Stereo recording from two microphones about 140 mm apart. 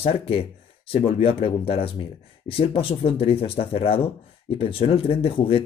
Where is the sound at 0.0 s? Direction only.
45° left (ahead or behind).